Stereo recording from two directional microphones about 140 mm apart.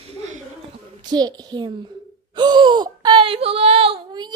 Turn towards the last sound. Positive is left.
turn(degrees=-30)  # may be behind; listen again after turning